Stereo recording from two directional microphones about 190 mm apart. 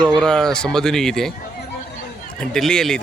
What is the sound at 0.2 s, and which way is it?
Speech, 5° left (ahead or behind).